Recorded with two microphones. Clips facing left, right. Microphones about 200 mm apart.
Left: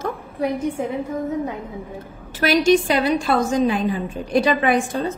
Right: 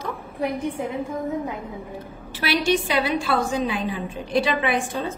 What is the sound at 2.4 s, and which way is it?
A woman's voice, 45° left (ahead or behind).